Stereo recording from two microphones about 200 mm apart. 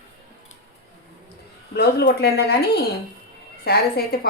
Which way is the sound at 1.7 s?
55° left (ahead or behind).